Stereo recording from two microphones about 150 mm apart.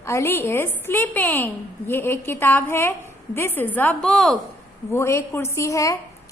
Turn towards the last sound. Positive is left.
turn(degrees=20)  # may be behind; listen again after turning